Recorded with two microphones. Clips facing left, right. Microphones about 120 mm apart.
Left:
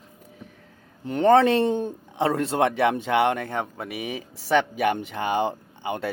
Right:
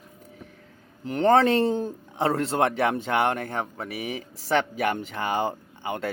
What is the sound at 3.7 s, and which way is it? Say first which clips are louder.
A man's voice: left 1 dB; 20° left (ahead or behind).